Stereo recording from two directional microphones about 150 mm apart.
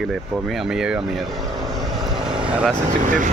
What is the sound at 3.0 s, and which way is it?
Speech, 55° right (ahead or behind).